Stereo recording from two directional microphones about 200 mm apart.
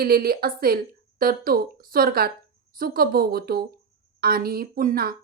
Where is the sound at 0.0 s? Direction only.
50° right (ahead or behind).